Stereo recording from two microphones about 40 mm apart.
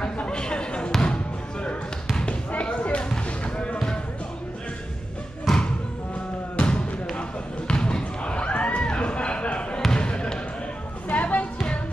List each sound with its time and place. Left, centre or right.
0.3 s basketball bounce: left
3.3 s a sound: left
5.5 s thump: centre
6.5 s music: left
7.2 s basketball bounce: left
11.1 s music: left